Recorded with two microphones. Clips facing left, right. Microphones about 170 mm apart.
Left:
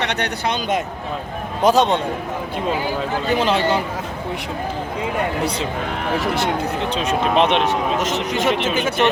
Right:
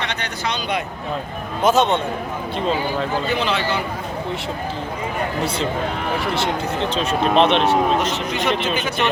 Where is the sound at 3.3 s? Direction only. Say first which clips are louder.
Left 4 dB; 45° left (ahead or behind).